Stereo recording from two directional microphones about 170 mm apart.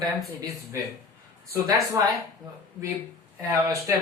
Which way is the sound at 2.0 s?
20° right (ahead or behind).